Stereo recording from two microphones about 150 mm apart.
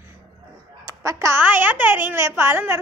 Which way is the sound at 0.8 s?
20° right (ahead or behind).